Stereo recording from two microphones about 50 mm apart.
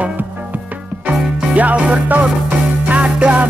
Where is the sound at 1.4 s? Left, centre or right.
Right.